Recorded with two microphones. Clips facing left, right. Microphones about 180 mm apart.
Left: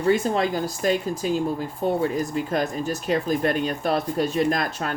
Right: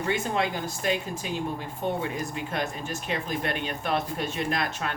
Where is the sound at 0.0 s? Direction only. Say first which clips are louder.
Left 6 dB; 40° left (ahead or behind).